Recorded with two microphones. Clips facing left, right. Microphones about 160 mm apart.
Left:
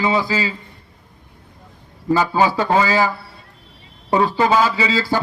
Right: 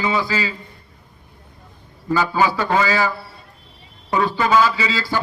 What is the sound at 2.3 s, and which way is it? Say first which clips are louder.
Speech: left 2 dB; 35° left (ahead or behind).